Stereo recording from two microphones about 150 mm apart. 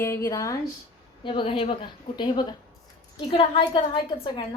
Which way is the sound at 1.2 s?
35° left (ahead or behind).